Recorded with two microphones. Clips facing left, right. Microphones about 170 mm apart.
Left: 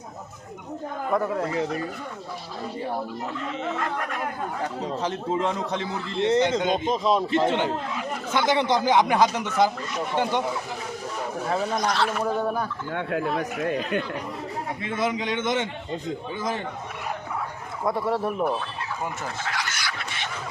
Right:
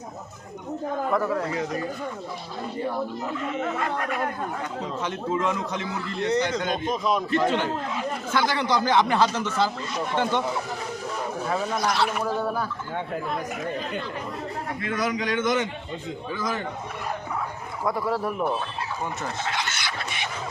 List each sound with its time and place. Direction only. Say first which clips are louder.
1.1 s a man's voice: left 3 dB; 20° left (ahead or behind)
4.6 s a man's voice: left 2 dB; 35° left (ahead or behind); by 9.7 s 15° left (ahead or behind)
11.4 s a man's voice: left 2 dB; 25° left (ahead or behind)
11.9 s speech: even; 10° right (ahead or behind)
12.2 s a man's voice: left 1 dB; 20° left (ahead or behind)
12.9 s speech: left 6 dB; 70° left (ahead or behind)
14.8 s a man's voice: even; 25° left (ahead or behind)
17.8 s a man's voice: left 1 dB; 25° left (ahead or behind)
19.5 s fowl: right 1 dB; 25° right (ahead or behind)
20.1 s a sound: right 1 dB; 15° right (ahead or behind)